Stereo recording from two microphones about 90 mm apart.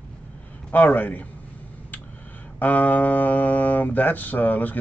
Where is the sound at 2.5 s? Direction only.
20° left (ahead or behind).